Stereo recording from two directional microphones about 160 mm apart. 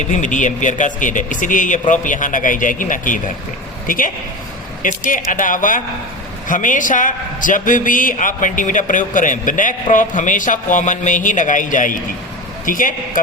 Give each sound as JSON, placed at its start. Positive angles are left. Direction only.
{"t": 0.2, "sound": "a man's voice", "side_deg": 50}